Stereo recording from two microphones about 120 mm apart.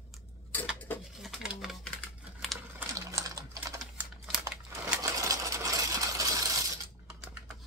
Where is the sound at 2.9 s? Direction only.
30° right (ahead or behind).